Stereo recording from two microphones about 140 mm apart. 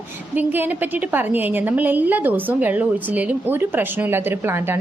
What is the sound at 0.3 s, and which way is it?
A woman's voice, 15° right (ahead or behind).